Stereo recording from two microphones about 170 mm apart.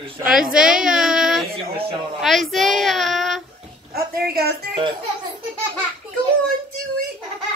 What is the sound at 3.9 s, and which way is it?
Speech, 65° right (ahead or behind).